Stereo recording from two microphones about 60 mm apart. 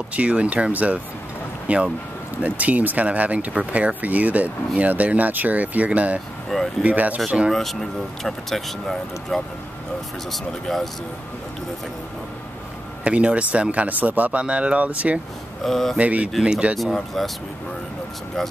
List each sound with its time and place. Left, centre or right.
0.1 s speech: right
7.2 s speech: centre
7.5 s speech: centre
13.0 s speech: centre
15.6 s speech: centre
16.0 s speech: right
16.7 s speech: centre